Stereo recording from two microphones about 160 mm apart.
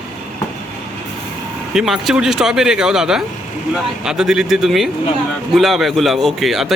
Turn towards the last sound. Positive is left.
turn(degrees=0)  # may be behind; listen again after turning